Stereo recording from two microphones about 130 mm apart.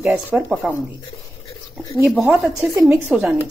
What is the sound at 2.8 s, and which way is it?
Speech, 15° right (ahead or behind).